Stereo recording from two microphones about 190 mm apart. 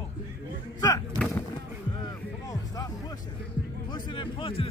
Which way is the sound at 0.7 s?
20° left (ahead or behind).